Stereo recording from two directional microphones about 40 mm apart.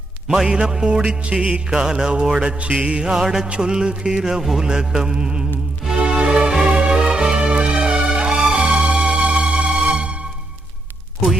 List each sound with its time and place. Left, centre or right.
0.3 s music: centre
3.0 s music: centre